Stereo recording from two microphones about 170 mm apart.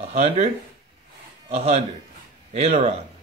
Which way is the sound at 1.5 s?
40° right (ahead or behind).